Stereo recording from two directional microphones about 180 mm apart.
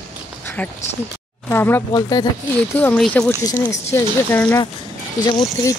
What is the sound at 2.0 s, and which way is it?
Speech, 20° left (ahead or behind).